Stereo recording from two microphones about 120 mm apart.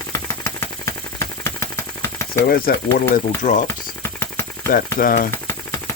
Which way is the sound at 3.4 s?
90° left.